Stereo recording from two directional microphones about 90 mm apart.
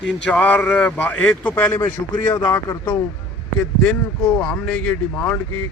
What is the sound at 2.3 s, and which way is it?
Speech, 40° left (ahead or behind).